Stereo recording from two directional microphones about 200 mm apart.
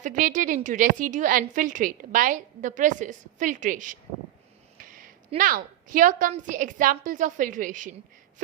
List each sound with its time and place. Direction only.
0.0 s a woman's voice: 40° right (ahead or behind)
4.8 s a sound: 45° right (ahead or behind)
5.4 s a woman's voice: 45° right (ahead or behind)